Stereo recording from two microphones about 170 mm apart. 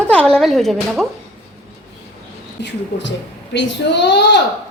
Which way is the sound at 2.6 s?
90° left.